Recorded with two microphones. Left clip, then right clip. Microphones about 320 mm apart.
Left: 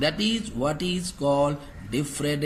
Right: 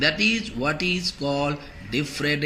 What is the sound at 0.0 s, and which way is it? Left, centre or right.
Speech, centre.